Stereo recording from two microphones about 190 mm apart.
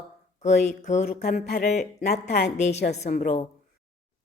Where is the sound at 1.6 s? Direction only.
40° left (ahead or behind).